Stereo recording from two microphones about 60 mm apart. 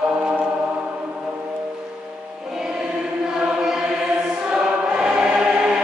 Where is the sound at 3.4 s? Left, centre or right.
Centre.